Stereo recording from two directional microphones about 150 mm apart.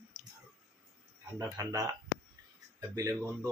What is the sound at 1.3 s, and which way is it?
Speech, 20° right (ahead or behind).